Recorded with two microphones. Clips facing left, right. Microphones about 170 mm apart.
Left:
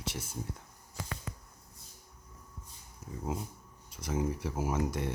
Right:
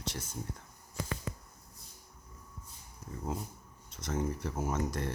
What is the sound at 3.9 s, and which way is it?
Speech, 10° left (ahead or behind).